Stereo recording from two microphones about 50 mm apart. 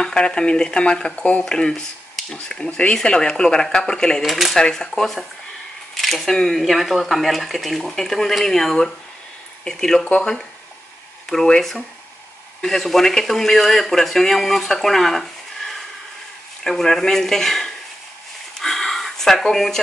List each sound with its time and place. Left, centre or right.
0.0 s a man's voice: centre
4.2 s speech: centre
4.6 s a man's voice: centre
5.9 s a sound: centre
6.3 s a man's voice: centre
6.6 s a man's voice: centre
11.2 s a man's voice: centre
18.6 s a sound: centre